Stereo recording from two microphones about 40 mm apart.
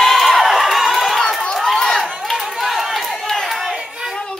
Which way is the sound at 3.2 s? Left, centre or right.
Centre.